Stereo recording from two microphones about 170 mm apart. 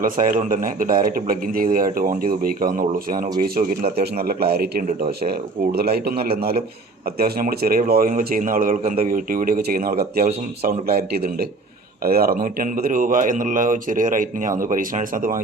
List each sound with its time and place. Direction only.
0.0 s speech: 50° right (ahead or behind)